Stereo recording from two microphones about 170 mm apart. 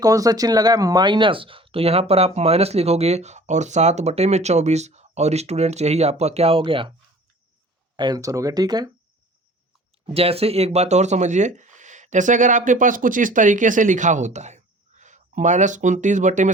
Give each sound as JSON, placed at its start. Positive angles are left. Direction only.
{"t": 0.0, "sound": "speech", "side_deg": -20}
{"t": 7.9, "sound": "speech", "side_deg": -25}
{"t": 10.1, "sound": "speech", "side_deg": -35}